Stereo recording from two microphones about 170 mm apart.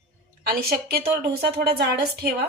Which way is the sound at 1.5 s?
70° right (ahead or behind).